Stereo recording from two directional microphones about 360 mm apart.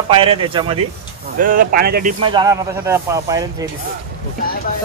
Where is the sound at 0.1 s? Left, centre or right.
Centre.